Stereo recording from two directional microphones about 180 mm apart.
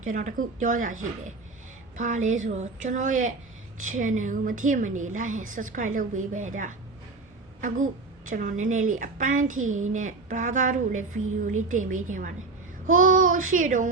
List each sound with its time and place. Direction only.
0.0 s a woman's voice: 45° right (ahead or behind)
8.3 s a woman's voice: 45° right (ahead or behind)
12.9 s child singing: 45° right (ahead or behind)